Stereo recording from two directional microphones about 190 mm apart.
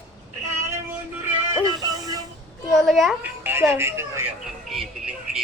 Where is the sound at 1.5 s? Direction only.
20° right (ahead or behind).